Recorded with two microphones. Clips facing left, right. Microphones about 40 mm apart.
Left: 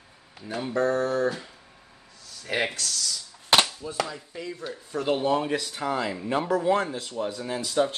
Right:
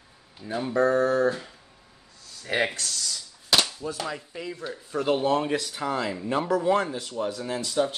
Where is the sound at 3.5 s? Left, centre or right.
Left.